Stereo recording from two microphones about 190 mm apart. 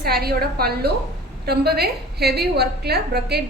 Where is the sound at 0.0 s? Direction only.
55° right (ahead or behind).